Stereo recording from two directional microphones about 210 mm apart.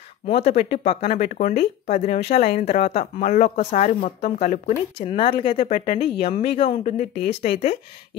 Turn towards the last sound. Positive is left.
turn(degrees=30)  # may be behind; listen again after turning